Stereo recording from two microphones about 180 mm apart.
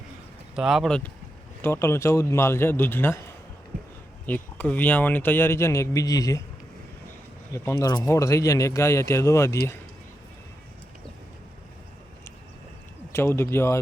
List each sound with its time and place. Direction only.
0.5 s a man's voice: centre (ahead or behind)
4.3 s a man's voice: 10° left (ahead or behind)
7.5 s a man's voice: 15° left (ahead or behind)
13.1 s a man's voice: 15° left (ahead or behind)